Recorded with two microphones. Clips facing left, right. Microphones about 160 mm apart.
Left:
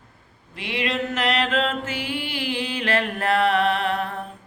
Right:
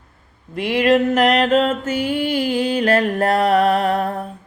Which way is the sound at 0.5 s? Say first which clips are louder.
Right 11 dB; 50° right (ahead or behind).